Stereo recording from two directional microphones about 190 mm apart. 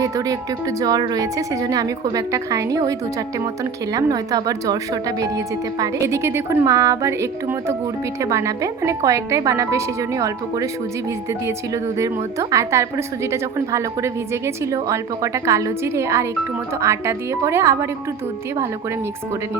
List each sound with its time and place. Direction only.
0.0 s a woman's voice: 20° right (ahead or behind)